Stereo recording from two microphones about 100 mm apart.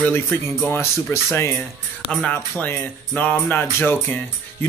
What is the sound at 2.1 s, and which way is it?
Speech, 10° left (ahead or behind).